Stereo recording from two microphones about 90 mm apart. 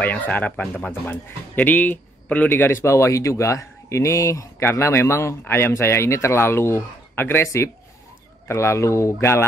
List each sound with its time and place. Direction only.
0.0 s a man's voice: 20° left (ahead or behind)